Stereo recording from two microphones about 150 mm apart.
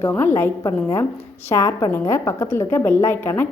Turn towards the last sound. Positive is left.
turn(degrees=15)  # may be behind; listen again after turning